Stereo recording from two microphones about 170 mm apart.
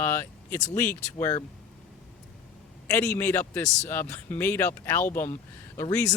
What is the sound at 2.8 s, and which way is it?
A man's voice, 10° left (ahead or behind).